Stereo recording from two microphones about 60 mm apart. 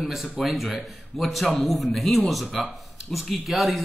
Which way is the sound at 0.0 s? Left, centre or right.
Centre.